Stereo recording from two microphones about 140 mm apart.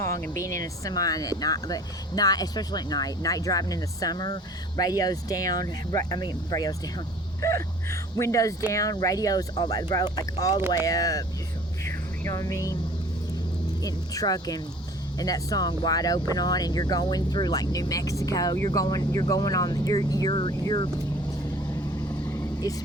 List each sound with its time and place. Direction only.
0.0 s speech: 20° left (ahead or behind)
11.9 s music: 20° left (ahead or behind)
13.8 s speech: 25° left (ahead or behind)
22.2 s vehicle: 20° left (ahead or behind)